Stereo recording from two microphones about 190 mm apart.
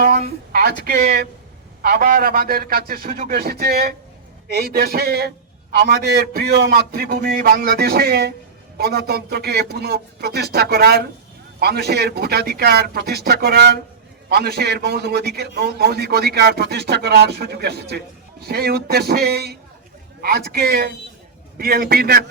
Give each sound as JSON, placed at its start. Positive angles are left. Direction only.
{"t": 0.0, "sound": "a man's voice", "side_deg": -55}